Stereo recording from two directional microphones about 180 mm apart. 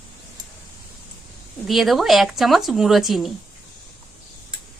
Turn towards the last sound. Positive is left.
turn(degrees=0)  # may be behind; listen again after turning